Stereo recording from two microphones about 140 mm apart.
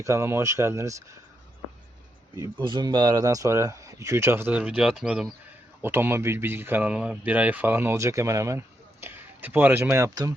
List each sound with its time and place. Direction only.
0.0 s speech: 20° right (ahead or behind)
2.3 s speech: 20° right (ahead or behind)
2.6 s speech: 30° right (ahead or behind); by 5.3 s 5° right (ahead or behind)
5.8 s speech: 15° right (ahead or behind)